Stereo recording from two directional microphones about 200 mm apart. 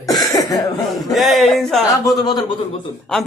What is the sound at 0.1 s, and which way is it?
Cough, 20° left (ahead or behind).